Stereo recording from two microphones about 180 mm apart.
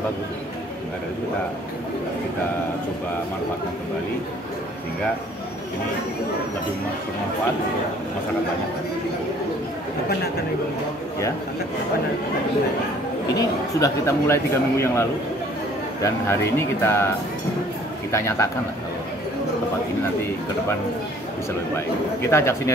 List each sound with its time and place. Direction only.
13.3 s speech: 20° left (ahead or behind)
18.1 s speech: 15° left (ahead or behind)
21.7 s speech: 15° left (ahead or behind)